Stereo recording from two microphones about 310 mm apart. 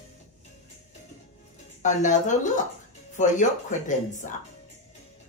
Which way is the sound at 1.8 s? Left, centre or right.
Left.